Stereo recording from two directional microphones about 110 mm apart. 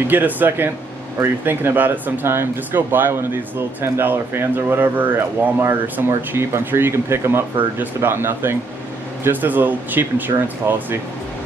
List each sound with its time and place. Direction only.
0.1 s speech: 15° right (ahead or behind)